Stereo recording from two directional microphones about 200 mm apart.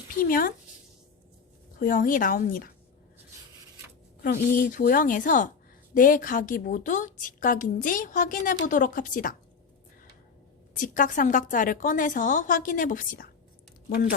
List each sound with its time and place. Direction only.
0.2 s a woman's voice: 45° left (ahead or behind)
1.8 s a woman's voice: 45° left (ahead or behind)
4.2 s a woman's voice: 45° left (ahead or behind)
10.8 s a woman's voice: 40° left (ahead or behind)